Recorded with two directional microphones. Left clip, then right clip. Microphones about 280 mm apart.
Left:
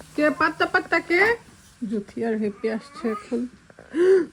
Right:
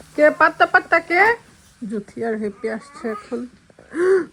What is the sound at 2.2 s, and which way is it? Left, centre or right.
Speech, right.